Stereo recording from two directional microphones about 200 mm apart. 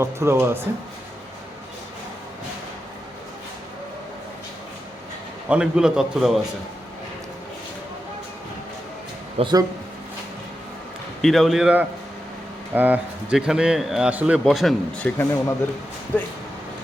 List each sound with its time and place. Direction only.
0.0 s speech: 15° right (ahead or behind)
5.5 s a man's voice: 5° right (ahead or behind)
9.4 s speech: 20° right (ahead or behind)
11.2 s a man's voice: centre (ahead or behind)